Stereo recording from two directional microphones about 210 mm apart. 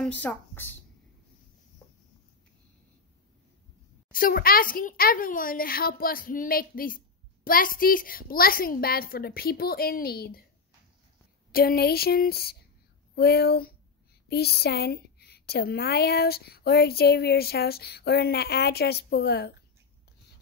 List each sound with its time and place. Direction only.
0.0 s a woman's voice: 5° left (ahead or behind)
4.1 s a woman's voice: 45° left (ahead or behind)
11.5 s a woman's voice: 45° left (ahead or behind)